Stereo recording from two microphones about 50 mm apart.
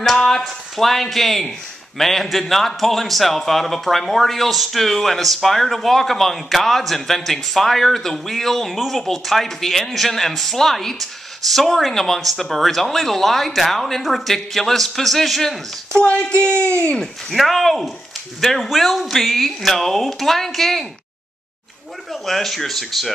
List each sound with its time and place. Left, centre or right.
0.0 s a man's voice: centre
15.9 s a sound: centre
17.0 s a man's voice: centre
22.1 s a man's voice: centre